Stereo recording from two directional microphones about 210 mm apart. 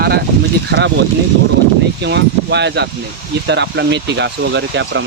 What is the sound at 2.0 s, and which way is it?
Speech, 55° right (ahead or behind).